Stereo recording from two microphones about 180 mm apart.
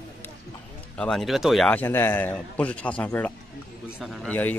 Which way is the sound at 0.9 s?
5° left (ahead or behind).